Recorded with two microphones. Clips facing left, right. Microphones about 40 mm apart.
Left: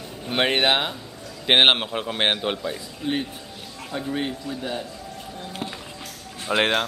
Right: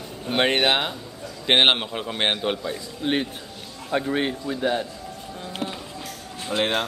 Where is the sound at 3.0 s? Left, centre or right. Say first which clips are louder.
Right 2 dB; right.